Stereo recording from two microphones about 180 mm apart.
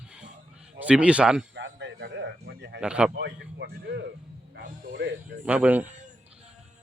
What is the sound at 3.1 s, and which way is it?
Speech, 70° right (ahead or behind).